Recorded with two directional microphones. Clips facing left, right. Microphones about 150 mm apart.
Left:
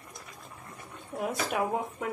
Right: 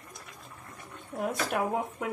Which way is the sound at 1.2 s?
5° left (ahead or behind).